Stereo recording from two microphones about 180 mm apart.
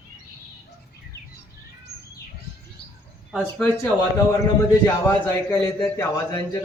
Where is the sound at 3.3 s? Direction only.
Centre (ahead or behind).